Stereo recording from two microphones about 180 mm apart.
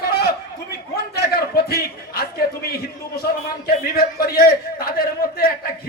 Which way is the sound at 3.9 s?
60° left (ahead or behind).